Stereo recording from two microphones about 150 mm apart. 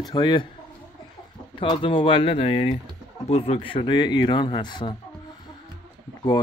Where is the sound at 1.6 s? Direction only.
35° left (ahead or behind).